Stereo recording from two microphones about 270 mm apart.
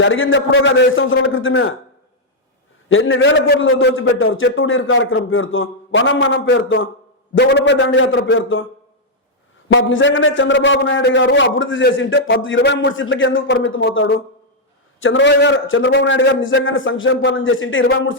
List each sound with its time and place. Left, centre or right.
0.0 s a man's voice: left
2.9 s a man's voice: left
9.7 s a man's voice: left